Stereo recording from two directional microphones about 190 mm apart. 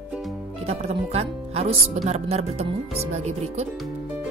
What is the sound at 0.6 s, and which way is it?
Speech, 35° right (ahead or behind).